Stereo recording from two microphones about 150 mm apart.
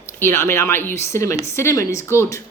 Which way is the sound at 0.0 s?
15° left (ahead or behind).